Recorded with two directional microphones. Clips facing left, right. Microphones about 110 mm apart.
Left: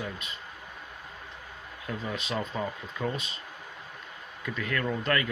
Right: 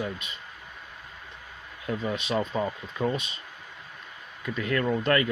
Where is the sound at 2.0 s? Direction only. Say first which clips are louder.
Right 5 dB; 20° right (ahead or behind).